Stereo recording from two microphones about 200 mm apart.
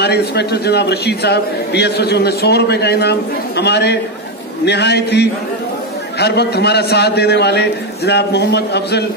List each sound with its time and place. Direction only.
0.0 s a man's voice: 55° left (ahead or behind)